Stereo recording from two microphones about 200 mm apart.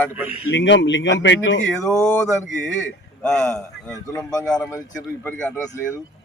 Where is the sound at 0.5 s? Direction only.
65° left (ahead or behind).